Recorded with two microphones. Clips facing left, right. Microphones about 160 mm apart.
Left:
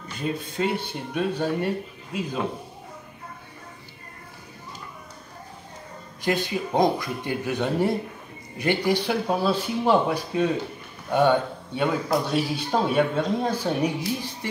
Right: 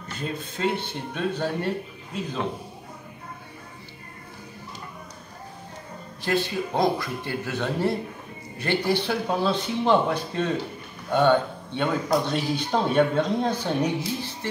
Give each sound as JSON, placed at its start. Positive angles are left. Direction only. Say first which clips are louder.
{"t": 0.6, "sound": "speech", "louder": "right 2 dB", "side_deg": 10}
{"t": 6.2, "sound": "speech", "louder": "even", "side_deg": 15}